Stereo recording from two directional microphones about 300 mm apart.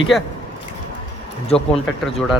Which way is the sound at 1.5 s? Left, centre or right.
Centre.